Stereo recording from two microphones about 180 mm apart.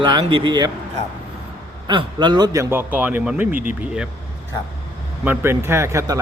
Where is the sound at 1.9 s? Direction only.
25° right (ahead or behind); by 3.6 s 10° right (ahead or behind).